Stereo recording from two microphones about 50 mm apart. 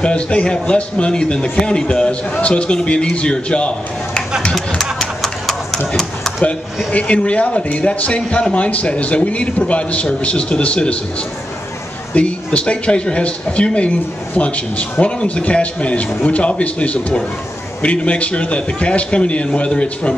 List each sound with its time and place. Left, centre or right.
0.0 s speech: left
5.2 s a sound: centre
6.9 s speech: left
12.1 s speech: left